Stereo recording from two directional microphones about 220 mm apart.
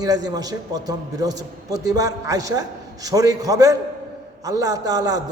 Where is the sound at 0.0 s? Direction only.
15° right (ahead or behind).